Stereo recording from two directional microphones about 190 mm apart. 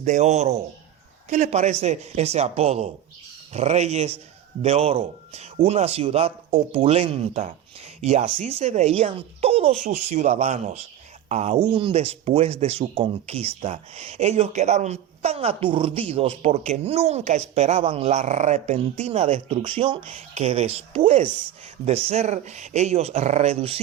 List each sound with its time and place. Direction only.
0.0 s speech: 35° right (ahead or behind)